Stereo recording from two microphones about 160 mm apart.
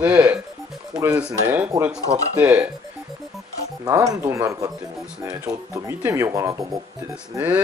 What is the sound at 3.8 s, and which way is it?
Speech, 20° right (ahead or behind).